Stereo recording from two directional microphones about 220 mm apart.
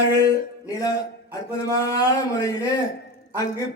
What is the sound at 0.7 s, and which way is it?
Speech, 15° left (ahead or behind).